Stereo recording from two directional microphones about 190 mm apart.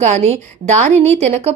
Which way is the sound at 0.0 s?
35° right (ahead or behind).